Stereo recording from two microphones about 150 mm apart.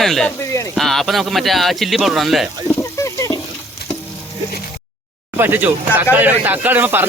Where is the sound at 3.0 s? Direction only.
20° left (ahead or behind).